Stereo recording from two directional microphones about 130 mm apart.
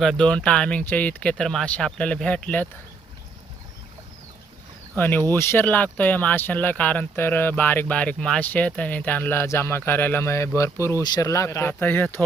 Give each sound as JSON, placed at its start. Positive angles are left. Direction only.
{"t": 0.0, "sound": "speech", "side_deg": 5}
{"t": 4.9, "sound": "speech", "side_deg": 15}